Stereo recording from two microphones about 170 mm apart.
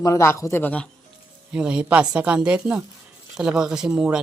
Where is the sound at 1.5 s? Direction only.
5° right (ahead or behind).